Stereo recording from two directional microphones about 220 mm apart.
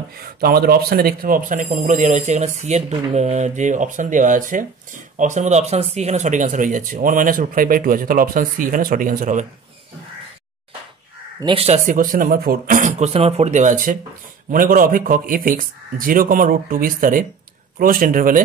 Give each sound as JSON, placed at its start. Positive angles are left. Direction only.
{"t": 0.2, "sound": "speech", "side_deg": -40}
{"t": 11.4, "sound": "speech", "side_deg": -25}